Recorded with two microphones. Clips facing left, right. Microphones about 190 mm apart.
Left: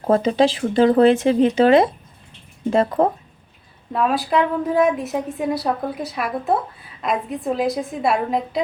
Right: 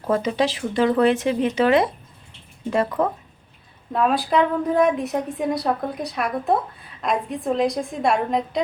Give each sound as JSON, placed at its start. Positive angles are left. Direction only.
{"t": 0.1, "sound": "speech", "side_deg": 30}
{"t": 3.9, "sound": "a woman's voice", "side_deg": 0}